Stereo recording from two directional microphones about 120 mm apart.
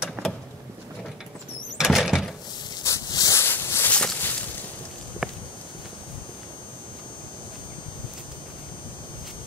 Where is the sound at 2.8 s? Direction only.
30° left (ahead or behind); by 4.3 s 10° left (ahead or behind).